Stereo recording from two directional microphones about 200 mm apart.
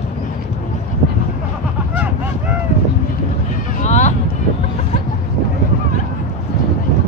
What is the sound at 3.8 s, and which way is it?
Vehicle, 35° left (ahead or behind).